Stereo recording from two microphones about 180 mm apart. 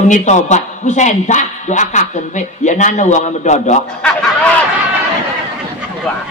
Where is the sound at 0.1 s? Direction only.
40° left (ahead or behind).